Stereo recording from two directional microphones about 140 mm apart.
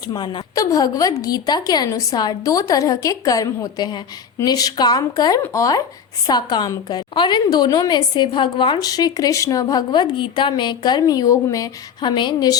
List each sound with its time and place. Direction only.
0.1 s a woman's voice: 30° left (ahead or behind)